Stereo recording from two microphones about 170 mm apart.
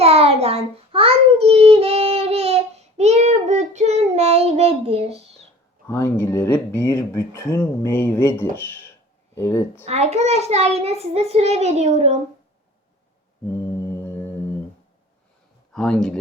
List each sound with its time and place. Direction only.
0.0 s child singing: 35° right (ahead or behind)
5.9 s speech: 15° left (ahead or behind)
9.8 s a child's voice: 40° right (ahead or behind)
13.8 s music: 20° left (ahead or behind)
15.7 s speech: 5° left (ahead or behind)